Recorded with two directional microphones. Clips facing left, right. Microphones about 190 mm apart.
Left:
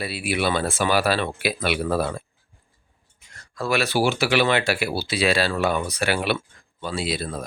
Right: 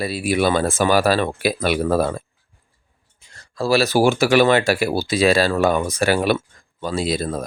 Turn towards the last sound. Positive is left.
turn(degrees=-45)  # may be behind; listen again after turning